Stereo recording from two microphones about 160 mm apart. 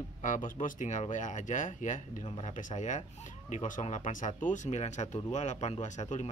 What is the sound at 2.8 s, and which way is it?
Speech, 50° left (ahead or behind).